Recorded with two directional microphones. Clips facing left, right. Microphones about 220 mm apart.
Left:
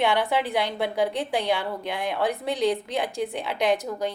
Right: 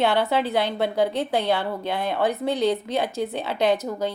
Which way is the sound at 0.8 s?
60° right (ahead or behind).